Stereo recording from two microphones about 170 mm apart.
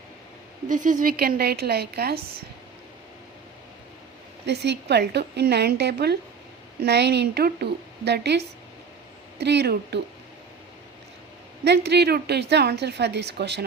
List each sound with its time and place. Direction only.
0.7 s a woman's voice: 50° right (ahead or behind); by 2.2 s 70° right (ahead or behind)
4.4 s a woman's voice: 85° right
11.6 s a woman's voice: 85° right